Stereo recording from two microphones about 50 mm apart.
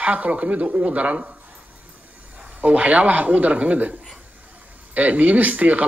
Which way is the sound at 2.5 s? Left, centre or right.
Right.